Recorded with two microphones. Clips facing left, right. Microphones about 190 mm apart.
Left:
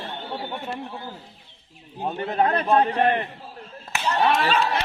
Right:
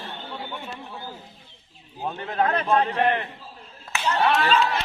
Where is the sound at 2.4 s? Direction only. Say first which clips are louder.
Left 1 dB; 35° left (ahead or behind).